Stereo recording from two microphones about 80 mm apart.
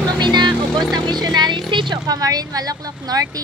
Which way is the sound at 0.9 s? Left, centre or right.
Right.